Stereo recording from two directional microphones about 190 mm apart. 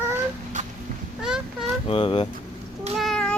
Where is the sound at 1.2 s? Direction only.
5° right (ahead or behind).